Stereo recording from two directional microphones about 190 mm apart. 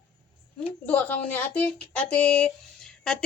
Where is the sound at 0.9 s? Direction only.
10° left (ahead or behind).